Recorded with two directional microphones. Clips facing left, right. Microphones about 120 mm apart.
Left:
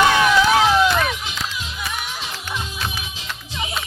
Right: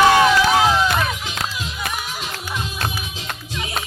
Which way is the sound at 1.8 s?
55° right (ahead or behind).